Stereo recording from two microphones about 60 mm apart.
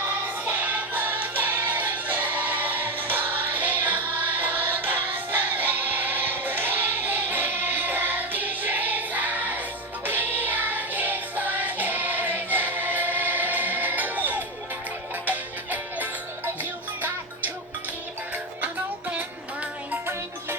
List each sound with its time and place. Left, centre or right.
0.4 s music: right